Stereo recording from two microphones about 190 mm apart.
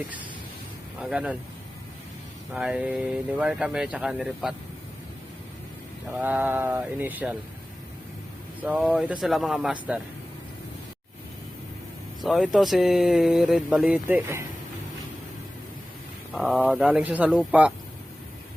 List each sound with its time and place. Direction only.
0.9 s speech: 5° right (ahead or behind)
2.5 s speech: 5° right (ahead or behind)
6.1 s speech: 10° right (ahead or behind)
8.6 s speech: 10° right (ahead or behind)
12.2 s speech: centre (ahead or behind)
16.3 s speech: 5° right (ahead or behind)